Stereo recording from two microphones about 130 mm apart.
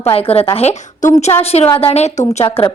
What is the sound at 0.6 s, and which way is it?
Speech, 65° left (ahead or behind).